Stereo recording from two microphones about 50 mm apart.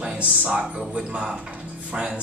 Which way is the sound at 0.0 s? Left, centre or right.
Right.